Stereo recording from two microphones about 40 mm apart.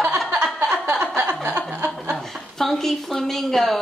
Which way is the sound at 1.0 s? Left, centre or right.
Right.